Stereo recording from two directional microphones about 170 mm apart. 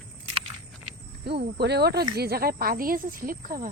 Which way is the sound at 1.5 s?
75° right (ahead or behind).